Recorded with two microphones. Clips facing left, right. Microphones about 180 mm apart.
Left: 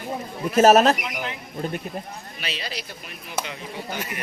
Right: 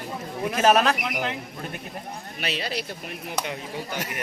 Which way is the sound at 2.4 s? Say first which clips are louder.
Right 4 dB; 55° right (ahead or behind).